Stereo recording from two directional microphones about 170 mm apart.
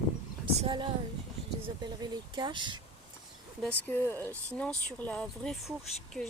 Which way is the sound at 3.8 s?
15° left (ahead or behind).